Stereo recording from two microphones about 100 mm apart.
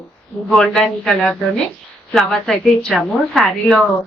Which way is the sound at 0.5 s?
5° left (ahead or behind).